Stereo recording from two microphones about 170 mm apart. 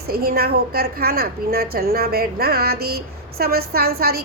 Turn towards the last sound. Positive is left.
turn(degrees=-65)  # may be behind; listen again after turning